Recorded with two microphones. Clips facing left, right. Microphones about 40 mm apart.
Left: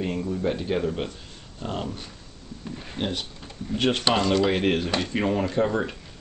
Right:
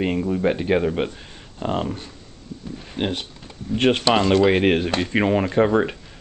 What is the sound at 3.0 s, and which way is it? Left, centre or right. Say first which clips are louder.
Speech: right 4 dB; right.